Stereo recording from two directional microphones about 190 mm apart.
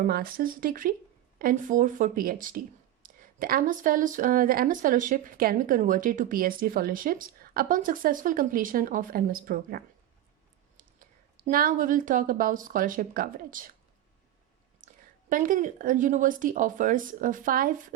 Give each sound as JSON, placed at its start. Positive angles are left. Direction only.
{"t": 0.0, "sound": "a woman's voice", "side_deg": -50}
{"t": 14.8, "sound": "a sound", "side_deg": -45}
{"t": 15.3, "sound": "speech", "side_deg": -45}